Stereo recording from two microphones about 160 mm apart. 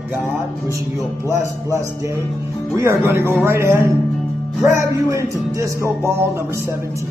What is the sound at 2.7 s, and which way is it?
Speech, 15° right (ahead or behind).